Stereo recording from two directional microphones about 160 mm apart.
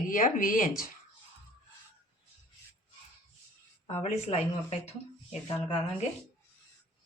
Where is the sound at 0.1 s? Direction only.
55° left (ahead or behind).